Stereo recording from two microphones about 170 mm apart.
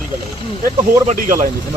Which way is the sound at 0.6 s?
55° right (ahead or behind).